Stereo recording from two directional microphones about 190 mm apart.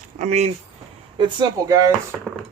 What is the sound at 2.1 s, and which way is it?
Speech, centre (ahead or behind).